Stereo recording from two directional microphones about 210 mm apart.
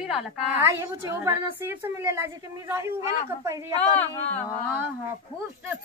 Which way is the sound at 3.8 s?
10° left (ahead or behind).